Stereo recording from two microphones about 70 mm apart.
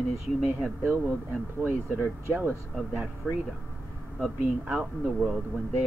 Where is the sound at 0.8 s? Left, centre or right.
Right.